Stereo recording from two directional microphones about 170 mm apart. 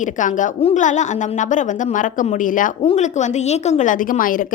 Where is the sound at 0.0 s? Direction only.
50° left (ahead or behind).